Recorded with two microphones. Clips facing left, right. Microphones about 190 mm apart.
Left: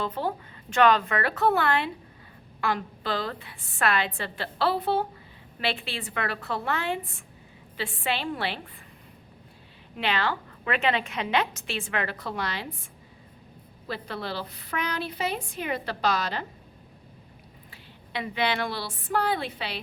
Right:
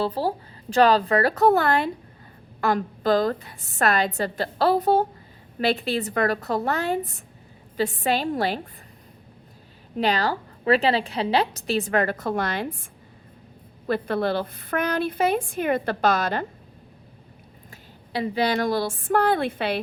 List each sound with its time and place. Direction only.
0.0 s a woman's voice: 35° right (ahead or behind)
10.0 s a woman's voice: 40° right (ahead or behind)
17.7 s a woman's voice: 35° right (ahead or behind); by 19.8 s 55° right (ahead or behind)